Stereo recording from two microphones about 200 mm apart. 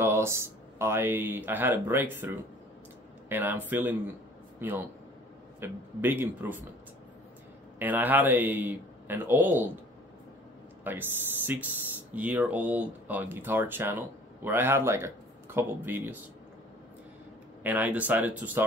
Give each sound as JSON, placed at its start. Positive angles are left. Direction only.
{"t": 0.0, "sound": "a man's voice", "side_deg": -15}
{"t": 7.8, "sound": "speech", "side_deg": -10}
{"t": 10.8, "sound": "speech", "side_deg": -10}
{"t": 17.6, "sound": "speech", "side_deg": -10}